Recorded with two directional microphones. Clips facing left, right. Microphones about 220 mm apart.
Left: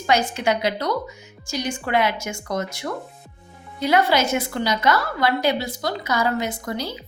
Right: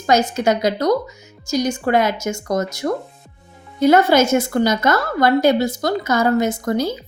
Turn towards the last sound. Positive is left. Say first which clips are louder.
# right 8 dB
turn(degrees=-45)  # may be behind; listen again after turning